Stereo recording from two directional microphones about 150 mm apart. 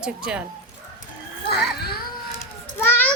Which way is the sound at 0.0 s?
5° right (ahead or behind).